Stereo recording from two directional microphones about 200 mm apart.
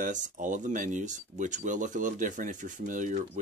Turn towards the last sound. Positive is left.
turn(degrees=-40)  # may be behind; listen again after turning